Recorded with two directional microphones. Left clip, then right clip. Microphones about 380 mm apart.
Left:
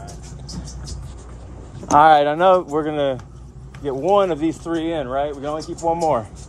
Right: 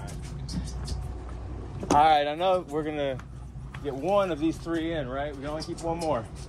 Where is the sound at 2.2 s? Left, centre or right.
Left.